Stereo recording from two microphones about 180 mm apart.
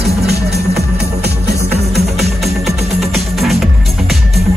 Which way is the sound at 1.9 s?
Centre (ahead or behind).